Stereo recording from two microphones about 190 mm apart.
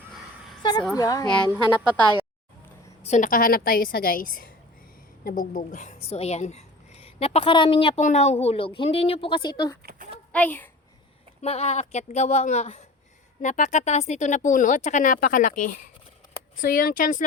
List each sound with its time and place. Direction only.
0.6 s a woman's voice: 25° left (ahead or behind)
3.1 s a woman's voice: 45° left (ahead or behind); by 9.7 s 20° left (ahead or behind)
10.3 s a child's voice: 10° left (ahead or behind)
11.3 s a woman's voice: 35° left (ahead or behind)